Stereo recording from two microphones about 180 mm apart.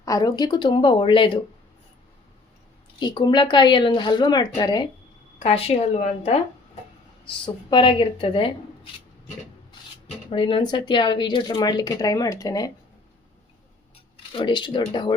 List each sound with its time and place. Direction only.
0.0 s a woman's voice: 20° left (ahead or behind)
3.0 s a woman's voice: 25° left (ahead or behind)
5.4 s a woman's voice: 35° left (ahead or behind)
10.2 s a woman's voice: 30° left (ahead or behind)
14.3 s a woman's voice: 25° left (ahead or behind)